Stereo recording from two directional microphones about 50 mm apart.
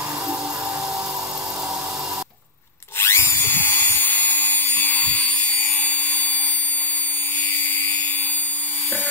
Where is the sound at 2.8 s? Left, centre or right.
Left.